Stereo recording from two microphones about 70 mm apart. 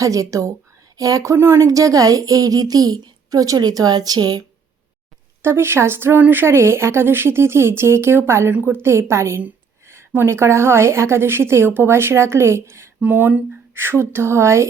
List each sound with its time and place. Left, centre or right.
0.0 s a woman's voice: right
5.4 s speech: right